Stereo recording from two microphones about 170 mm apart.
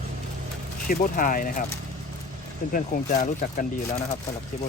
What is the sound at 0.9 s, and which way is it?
Speech, 55° left (ahead or behind).